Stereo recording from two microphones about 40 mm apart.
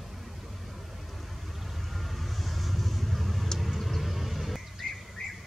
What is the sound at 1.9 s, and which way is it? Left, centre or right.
Vehicle, centre.